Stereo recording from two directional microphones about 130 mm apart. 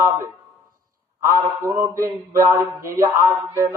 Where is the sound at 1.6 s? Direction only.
20° right (ahead or behind).